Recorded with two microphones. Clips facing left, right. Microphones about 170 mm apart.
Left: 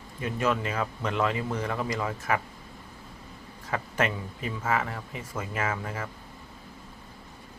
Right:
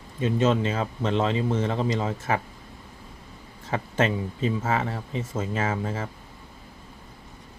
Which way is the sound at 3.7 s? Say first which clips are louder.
Right 4 dB; 25° right (ahead or behind).